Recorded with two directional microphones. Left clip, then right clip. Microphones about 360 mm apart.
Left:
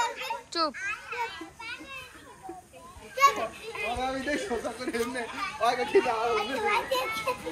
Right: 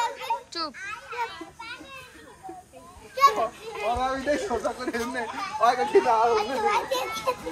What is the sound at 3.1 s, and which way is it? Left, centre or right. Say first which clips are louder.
A child's voice: right 3 dB; centre.